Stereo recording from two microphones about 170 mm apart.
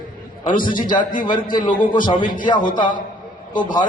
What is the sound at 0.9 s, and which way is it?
A man's voice, 50° left (ahead or behind).